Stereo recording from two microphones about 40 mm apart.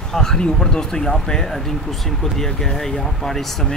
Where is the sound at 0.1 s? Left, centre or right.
Centre.